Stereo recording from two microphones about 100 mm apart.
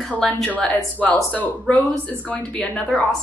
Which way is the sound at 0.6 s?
15° left (ahead or behind).